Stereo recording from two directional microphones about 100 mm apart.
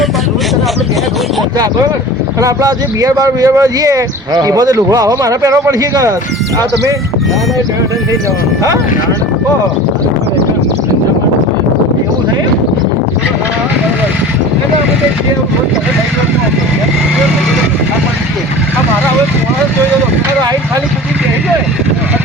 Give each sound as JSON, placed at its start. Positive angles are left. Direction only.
{"t": 2.4, "sound": "speech", "side_deg": -35}